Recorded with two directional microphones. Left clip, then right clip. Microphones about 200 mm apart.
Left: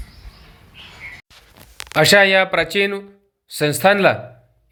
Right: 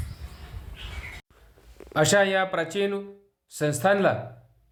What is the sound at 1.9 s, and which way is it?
Speech, 15° left (ahead or behind).